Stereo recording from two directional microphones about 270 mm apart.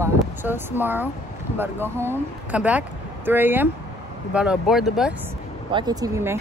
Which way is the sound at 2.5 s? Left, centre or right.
Centre.